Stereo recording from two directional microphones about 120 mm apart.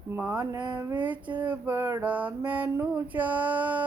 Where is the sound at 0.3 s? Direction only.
30° right (ahead or behind).